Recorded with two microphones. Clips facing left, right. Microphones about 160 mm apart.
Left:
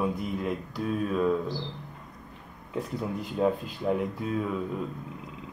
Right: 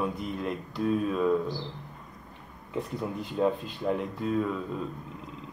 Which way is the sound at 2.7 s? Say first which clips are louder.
Left 1 dB; centre (ahead or behind).